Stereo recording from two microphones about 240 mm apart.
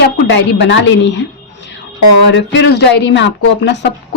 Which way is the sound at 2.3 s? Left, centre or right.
Left.